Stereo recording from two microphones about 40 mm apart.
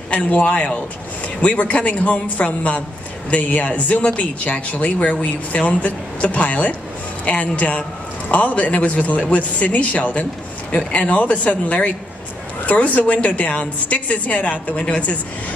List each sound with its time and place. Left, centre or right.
0.1 s speech: left